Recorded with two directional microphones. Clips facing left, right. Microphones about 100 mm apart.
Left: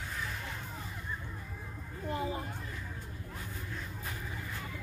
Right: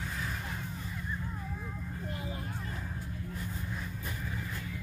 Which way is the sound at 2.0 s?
30° left (ahead or behind).